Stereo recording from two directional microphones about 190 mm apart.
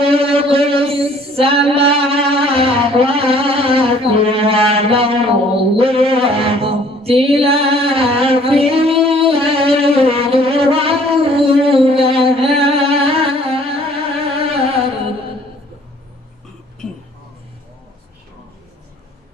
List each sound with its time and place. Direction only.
0.0 s female singing: 30° right (ahead or behind)
5.7 s music: 30° right (ahead or behind)